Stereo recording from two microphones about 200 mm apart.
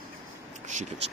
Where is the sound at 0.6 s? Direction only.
35° right (ahead or behind).